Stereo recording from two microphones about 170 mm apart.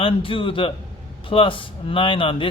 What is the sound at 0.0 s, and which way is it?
A man's voice, 30° left (ahead or behind).